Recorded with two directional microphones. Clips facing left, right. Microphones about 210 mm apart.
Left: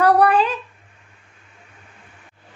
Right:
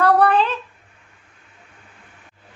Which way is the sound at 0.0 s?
10° left (ahead or behind).